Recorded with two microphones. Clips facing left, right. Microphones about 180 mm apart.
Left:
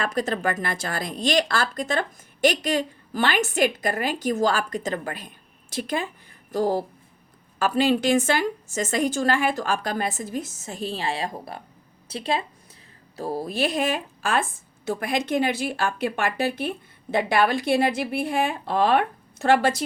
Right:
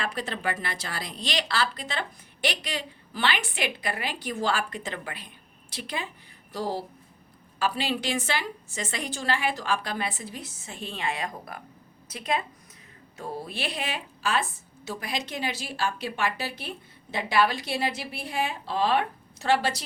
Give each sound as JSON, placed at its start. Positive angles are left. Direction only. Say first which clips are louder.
{"t": 0.0, "sound": "a woman's voice", "louder": "left 6 dB", "side_deg": 45}